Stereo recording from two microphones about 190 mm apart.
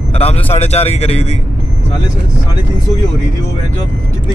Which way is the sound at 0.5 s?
35° left (ahead or behind).